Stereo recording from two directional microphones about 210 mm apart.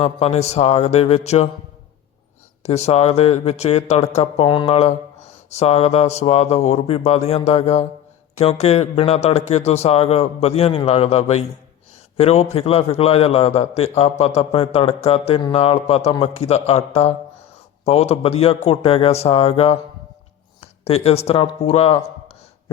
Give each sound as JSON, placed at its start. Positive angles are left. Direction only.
{"t": 0.0, "sound": "speech", "side_deg": 30}
{"t": 2.6, "sound": "a man's voice", "side_deg": 30}